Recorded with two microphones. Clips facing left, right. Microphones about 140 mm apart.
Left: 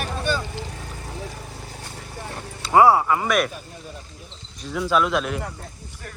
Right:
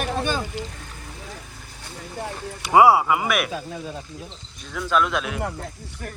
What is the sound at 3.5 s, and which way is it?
Speech, 90° right.